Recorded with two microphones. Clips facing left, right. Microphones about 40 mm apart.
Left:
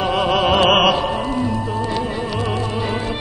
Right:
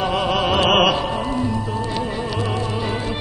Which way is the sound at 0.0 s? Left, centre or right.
Centre.